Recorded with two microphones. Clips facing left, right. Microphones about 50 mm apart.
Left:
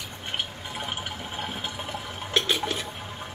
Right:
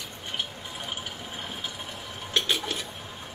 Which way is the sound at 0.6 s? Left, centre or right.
Left.